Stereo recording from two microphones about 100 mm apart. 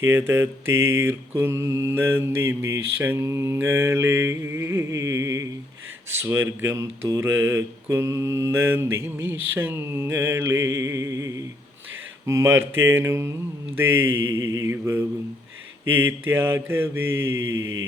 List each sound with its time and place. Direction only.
0.0 s mantra: 25° right (ahead or behind)